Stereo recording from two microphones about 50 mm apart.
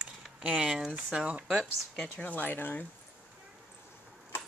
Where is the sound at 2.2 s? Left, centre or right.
Left.